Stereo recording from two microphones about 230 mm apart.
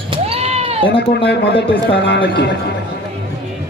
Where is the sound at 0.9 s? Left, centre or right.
Left.